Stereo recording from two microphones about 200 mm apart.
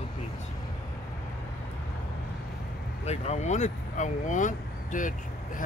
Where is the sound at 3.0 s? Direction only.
35° left (ahead or behind).